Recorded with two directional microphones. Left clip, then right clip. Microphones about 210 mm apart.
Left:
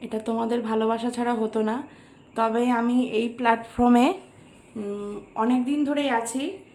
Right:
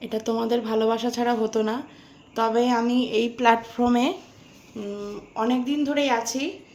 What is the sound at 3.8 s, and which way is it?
Speech, 20° left (ahead or behind).